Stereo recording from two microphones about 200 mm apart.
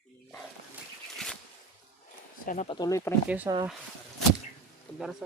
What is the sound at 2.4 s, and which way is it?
Speech, 40° left (ahead or behind).